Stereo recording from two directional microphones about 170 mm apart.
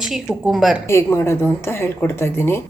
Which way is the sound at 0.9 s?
15° left (ahead or behind).